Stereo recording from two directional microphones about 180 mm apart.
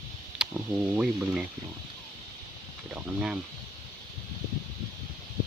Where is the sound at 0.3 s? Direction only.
10° right (ahead or behind).